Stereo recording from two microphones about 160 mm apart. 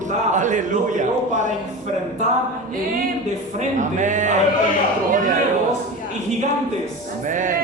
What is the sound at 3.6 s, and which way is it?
A man's voice, 50° right (ahead or behind).